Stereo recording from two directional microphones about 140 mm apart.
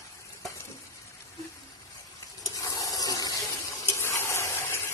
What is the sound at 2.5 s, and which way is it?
Fill, 25° left (ahead or behind).